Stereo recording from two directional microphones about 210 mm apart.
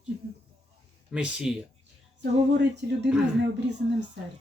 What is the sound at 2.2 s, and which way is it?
Speech, 55° right (ahead or behind).